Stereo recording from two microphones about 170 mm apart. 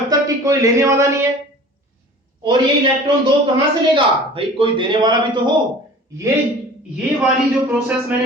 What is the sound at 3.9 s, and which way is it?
A man's voice, 30° right (ahead or behind).